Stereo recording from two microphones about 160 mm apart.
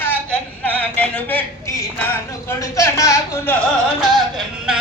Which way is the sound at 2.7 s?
20° left (ahead or behind).